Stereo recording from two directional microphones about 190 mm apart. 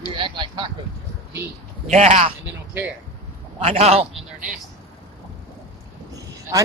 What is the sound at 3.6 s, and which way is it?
Speech, 35° right (ahead or behind).